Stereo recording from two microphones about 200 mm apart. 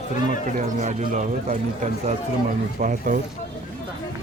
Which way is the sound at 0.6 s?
40° right (ahead or behind).